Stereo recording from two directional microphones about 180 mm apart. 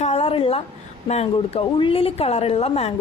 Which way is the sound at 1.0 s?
35° left (ahead or behind).